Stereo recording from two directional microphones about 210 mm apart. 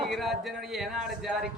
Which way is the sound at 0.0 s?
Centre (ahead or behind).